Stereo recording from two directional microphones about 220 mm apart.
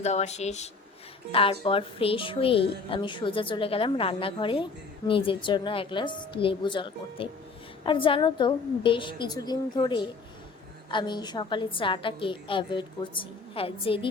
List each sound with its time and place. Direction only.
0.0 s speech: 30° left (ahead or behind)